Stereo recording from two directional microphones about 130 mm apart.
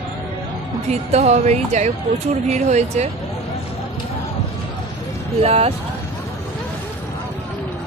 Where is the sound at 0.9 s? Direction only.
55° right (ahead or behind).